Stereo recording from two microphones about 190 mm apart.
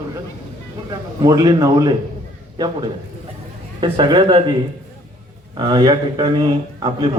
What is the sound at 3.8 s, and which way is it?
Speech, 25° right (ahead or behind).